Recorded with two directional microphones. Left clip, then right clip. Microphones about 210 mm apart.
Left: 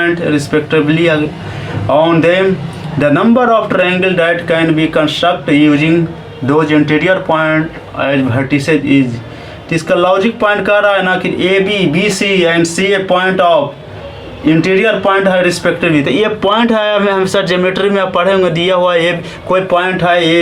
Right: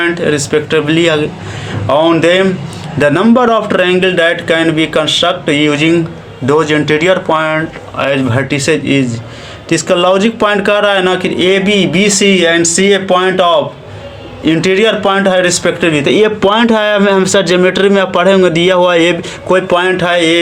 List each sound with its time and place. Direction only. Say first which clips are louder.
0.0 s a man's voice: right 1 dB; 45° right (ahead or behind)